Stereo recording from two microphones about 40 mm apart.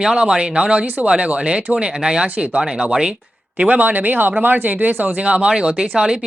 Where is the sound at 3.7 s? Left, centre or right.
Right.